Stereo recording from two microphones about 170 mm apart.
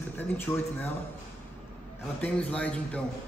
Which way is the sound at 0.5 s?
15° left (ahead or behind).